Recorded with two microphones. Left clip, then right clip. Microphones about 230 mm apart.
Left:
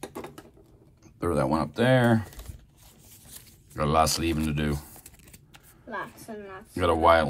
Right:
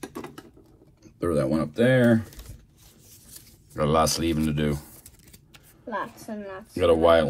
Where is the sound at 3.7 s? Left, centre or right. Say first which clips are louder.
Right 1 dB; left.